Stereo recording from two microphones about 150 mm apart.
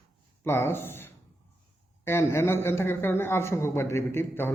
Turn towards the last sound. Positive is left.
turn(degrees=15)  # may be behind; listen again after turning